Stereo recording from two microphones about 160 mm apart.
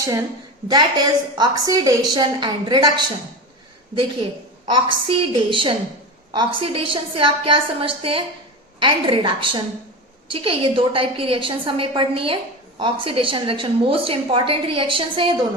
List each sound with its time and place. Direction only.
0.0 s a woman's voice: 20° right (ahead or behind)
4.7 s a woman's voice: 30° right (ahead or behind)